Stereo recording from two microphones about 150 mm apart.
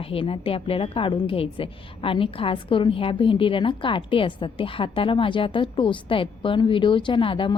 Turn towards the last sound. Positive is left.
turn(degrees=35)  # may be behind; listen again after turning